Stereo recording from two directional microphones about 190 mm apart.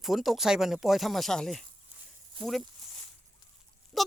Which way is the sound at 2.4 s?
25° right (ahead or behind).